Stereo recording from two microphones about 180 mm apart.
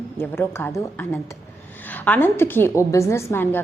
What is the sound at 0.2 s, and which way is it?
A woman's voice, 10° left (ahead or behind).